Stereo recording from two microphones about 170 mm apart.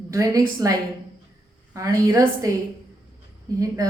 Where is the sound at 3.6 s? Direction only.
20° right (ahead or behind).